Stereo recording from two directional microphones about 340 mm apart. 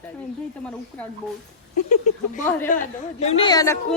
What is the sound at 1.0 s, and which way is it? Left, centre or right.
Speech, centre.